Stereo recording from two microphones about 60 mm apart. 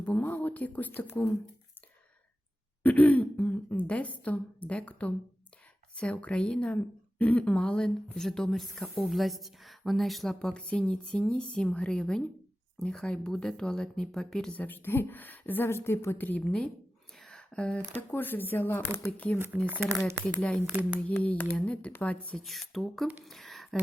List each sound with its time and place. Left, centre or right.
0.0 s speech: left
2.8 s a woman's voice: left; by 14.5 s centre
14.5 s a woman's voice: left
15.7 s a woman's voice: left
16.1 s a woman's voice: left
16.4 s a woman's voice: centre
17.2 s a sound: centre
17.5 s speech: centre
18.1 s a woman's voice: left
19.6 s speech: right
20.2 s a woman's voice: centre
21.2 s speech: left
22.4 s a woman's voice: centre
23.2 s a sound: centre